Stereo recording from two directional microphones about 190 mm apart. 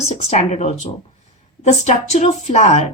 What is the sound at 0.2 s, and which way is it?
Speech, 35° left (ahead or behind).